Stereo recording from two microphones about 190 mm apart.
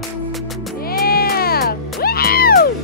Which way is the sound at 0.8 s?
50° left (ahead or behind).